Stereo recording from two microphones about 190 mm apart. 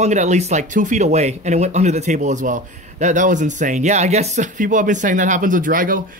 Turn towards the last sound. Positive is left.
turn(degrees=-45)  # may be behind; listen again after turning